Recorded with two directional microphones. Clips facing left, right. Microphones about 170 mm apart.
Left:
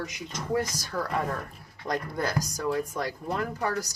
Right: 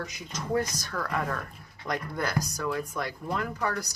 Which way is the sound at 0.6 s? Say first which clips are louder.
Left 1 dB; 30° left (ahead or behind).